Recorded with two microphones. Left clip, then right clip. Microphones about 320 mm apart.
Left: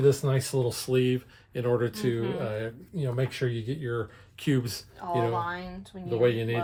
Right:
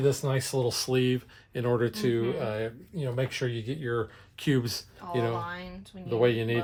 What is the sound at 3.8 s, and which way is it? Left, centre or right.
Speech, right.